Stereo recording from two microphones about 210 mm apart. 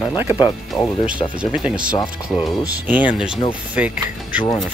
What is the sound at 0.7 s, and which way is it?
Speech, 5° left (ahead or behind).